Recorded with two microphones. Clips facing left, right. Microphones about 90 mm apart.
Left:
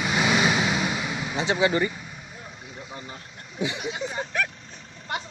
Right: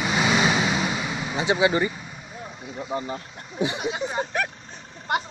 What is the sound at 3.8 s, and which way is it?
Speech, 30° right (ahead or behind).